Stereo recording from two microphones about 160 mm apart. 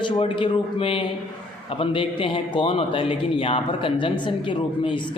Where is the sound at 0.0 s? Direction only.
30° left (ahead or behind).